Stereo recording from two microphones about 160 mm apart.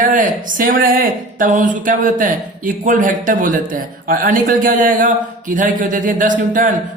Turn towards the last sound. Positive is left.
turn(degrees=-55)  # may be behind; listen again after turning